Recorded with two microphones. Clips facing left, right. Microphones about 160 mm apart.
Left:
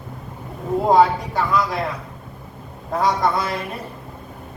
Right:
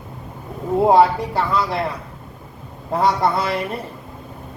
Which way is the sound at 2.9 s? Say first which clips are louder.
Right 1 dB; 30° right (ahead or behind).